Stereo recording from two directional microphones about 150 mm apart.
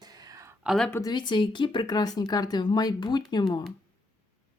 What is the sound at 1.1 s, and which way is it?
Speech, 30° left (ahead or behind).